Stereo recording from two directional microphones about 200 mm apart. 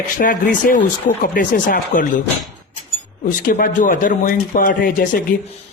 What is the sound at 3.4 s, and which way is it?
Speech, 45° left (ahead or behind).